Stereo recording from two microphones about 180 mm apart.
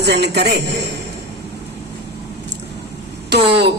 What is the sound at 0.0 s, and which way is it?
Speech, 65° right (ahead or behind).